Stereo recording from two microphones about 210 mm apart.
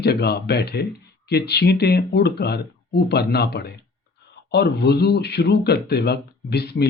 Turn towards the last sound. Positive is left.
turn(degrees=50)  # may be behind; listen again after turning